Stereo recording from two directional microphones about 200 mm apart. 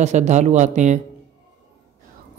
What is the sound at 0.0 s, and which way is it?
Speech, 35° right (ahead or behind).